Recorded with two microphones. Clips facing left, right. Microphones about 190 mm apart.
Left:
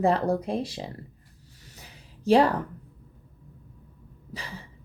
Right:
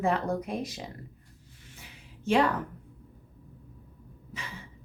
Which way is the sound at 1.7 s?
35° left (ahead or behind).